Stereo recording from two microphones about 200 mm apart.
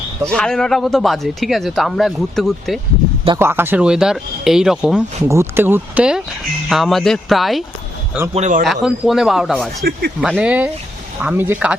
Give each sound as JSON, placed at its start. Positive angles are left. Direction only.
{"t": 0.3, "sound": "speech", "side_deg": 5}
{"t": 3.3, "sound": "speech", "side_deg": -10}
{"t": 8.3, "sound": "speech", "side_deg": -35}
{"t": 8.6, "sound": "speech", "side_deg": 0}